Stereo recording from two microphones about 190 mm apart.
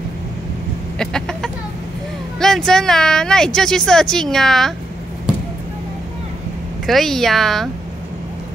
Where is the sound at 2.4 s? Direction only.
5° left (ahead or behind).